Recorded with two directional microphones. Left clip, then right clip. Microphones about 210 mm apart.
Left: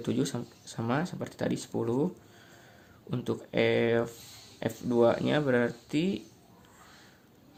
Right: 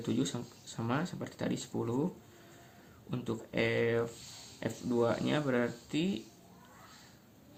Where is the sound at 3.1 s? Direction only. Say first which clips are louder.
Left 5 dB; 40° left (ahead or behind).